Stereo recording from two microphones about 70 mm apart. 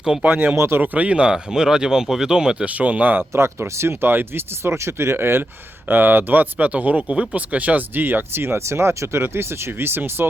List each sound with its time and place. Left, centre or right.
0.2 s speech: centre
0.5 s speech: right
0.8 s speech: right
3.3 s speech: right